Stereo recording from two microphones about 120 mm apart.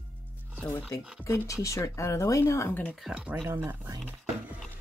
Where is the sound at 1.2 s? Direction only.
25° left (ahead or behind).